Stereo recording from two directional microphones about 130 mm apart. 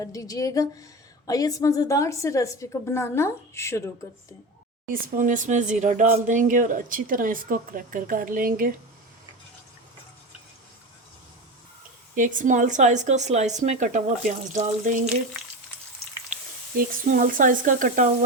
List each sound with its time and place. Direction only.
0.0 s a woman's voice: 25° left (ahead or behind)
4.9 s speech: 85° right
12.1 s speech: 90° right; by 15.1 s 65° right (ahead or behind)
16.7 s speech: 90° right